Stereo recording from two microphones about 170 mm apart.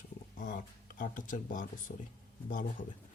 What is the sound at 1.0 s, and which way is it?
Speech, 50° left (ahead or behind).